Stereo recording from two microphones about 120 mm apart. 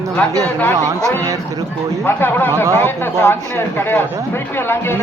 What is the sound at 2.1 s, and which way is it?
Speech, 20° left (ahead or behind).